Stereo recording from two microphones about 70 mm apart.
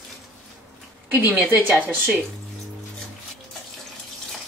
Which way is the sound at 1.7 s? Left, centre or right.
Right.